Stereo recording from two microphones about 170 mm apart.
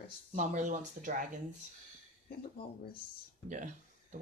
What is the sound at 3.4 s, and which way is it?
Speech, 45° right (ahead or behind).